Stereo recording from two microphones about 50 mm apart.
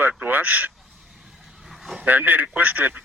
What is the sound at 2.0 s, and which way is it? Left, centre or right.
Speech, right.